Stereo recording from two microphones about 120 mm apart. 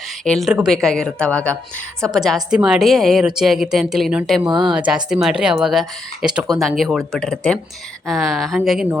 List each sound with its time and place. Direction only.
0.3 s a woman's voice: centre (ahead or behind)
2.1 s a woman's voice: centre (ahead or behind)
4.4 s a woman's voice: 40° right (ahead or behind)
4.7 s a woman's voice: 5° right (ahead or behind)